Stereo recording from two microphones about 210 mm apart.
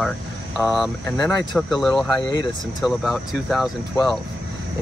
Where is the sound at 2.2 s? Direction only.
20° left (ahead or behind).